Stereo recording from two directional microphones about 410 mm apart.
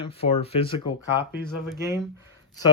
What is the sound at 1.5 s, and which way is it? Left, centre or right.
Speech, centre.